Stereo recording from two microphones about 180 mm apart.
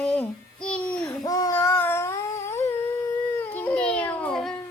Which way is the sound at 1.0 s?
20° left (ahead or behind).